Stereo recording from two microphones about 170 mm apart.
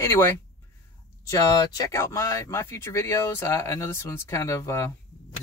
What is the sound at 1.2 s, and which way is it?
Speech, 20° left (ahead or behind).